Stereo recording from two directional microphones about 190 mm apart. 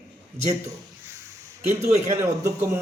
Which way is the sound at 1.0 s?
15° right (ahead or behind).